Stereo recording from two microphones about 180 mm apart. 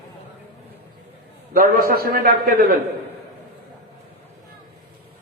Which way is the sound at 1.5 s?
55° right (ahead or behind).